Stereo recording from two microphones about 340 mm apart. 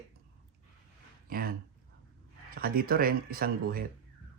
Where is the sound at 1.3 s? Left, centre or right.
Right.